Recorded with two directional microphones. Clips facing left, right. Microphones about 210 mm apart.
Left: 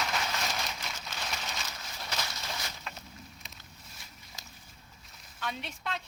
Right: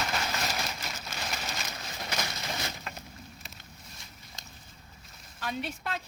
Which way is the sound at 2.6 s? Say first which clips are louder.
Right 4 dB; 55° right (ahead or behind).